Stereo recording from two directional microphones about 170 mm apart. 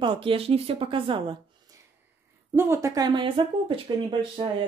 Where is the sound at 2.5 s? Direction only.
15° right (ahead or behind).